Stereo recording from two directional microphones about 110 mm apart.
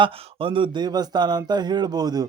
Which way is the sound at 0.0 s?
50° right (ahead or behind).